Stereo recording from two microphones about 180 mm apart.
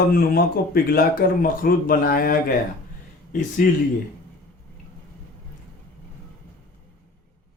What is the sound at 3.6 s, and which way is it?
Speech, 50° left (ahead or behind).